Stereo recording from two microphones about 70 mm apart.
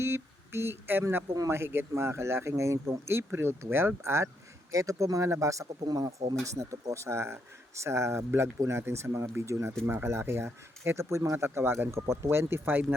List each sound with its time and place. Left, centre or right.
0.0 s a sound: right
1.5 s speech: right
5.8 s speech: right
6.4 s speech: right